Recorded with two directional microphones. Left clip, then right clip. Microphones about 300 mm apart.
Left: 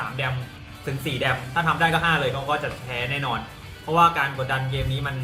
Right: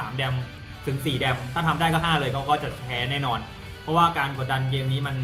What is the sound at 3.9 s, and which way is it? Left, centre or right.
Speech, centre.